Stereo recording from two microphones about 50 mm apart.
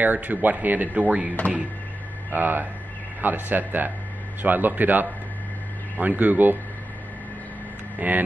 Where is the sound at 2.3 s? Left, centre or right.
Right.